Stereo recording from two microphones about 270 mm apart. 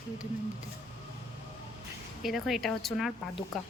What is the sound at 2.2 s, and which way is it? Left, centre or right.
Speech, centre.